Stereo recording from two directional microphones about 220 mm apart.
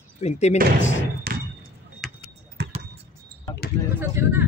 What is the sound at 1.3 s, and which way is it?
Basketball bounce, 45° right (ahead or behind).